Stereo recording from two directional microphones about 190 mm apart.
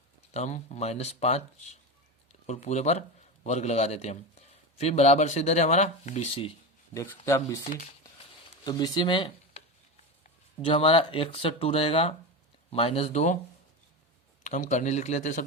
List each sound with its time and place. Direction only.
0.3 s a man's voice: 35° left (ahead or behind)
6.9 s speech: 15° left (ahead or behind)
10.7 s a man's voice: 30° left (ahead or behind)
14.4 s a man's voice: 40° left (ahead or behind)